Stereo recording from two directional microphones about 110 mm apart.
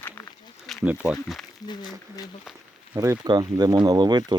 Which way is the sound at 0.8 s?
15° right (ahead or behind).